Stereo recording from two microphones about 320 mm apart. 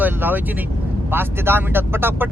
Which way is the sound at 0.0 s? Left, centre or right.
Centre.